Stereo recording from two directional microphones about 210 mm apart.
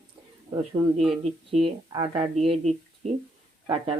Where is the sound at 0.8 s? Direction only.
25° right (ahead or behind).